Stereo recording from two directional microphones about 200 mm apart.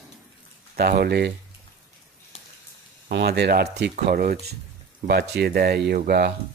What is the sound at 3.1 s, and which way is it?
Speech, 55° right (ahead or behind).